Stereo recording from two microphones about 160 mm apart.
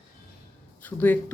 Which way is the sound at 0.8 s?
10° left (ahead or behind).